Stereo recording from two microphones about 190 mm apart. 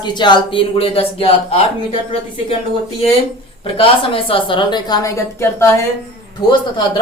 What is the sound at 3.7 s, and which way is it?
Speech, 30° left (ahead or behind).